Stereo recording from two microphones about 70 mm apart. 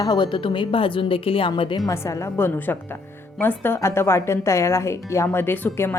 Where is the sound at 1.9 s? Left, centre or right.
Left.